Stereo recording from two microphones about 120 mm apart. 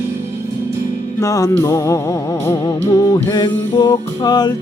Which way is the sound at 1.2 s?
25° left (ahead or behind).